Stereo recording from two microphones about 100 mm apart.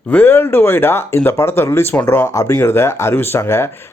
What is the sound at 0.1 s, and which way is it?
Speech, 20° left (ahead or behind).